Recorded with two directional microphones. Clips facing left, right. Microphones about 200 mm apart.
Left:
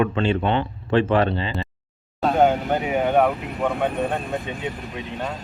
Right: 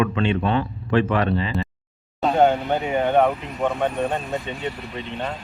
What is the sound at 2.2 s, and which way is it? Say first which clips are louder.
Speech: even; 5° left (ahead or behind).